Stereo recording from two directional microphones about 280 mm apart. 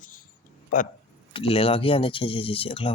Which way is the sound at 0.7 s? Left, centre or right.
Left.